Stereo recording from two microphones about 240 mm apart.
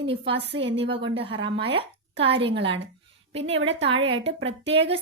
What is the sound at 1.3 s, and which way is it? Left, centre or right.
A woman's voice, right.